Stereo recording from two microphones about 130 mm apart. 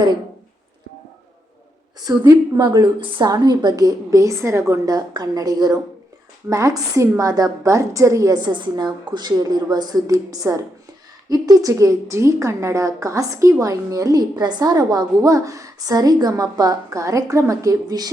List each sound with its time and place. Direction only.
2.0 s a woman's voice: 30° right (ahead or behind)